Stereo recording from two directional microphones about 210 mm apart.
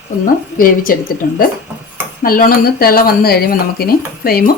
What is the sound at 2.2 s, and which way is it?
Speech, 40° left (ahead or behind).